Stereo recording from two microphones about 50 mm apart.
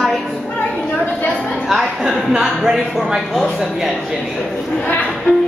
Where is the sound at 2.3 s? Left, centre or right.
Centre.